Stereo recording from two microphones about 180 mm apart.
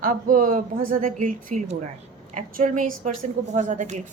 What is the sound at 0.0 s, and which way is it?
A woman's voice, 50° right (ahead or behind).